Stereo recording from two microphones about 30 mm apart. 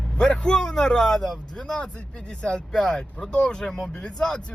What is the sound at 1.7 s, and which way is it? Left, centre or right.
Speech, left.